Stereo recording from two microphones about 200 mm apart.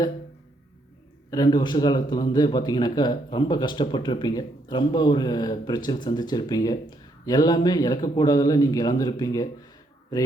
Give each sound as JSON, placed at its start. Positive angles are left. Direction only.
{"t": 1.3, "sound": "speech", "side_deg": 20}